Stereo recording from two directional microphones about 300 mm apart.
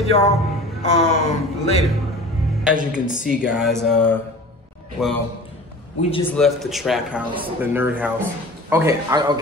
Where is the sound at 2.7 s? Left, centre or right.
Centre.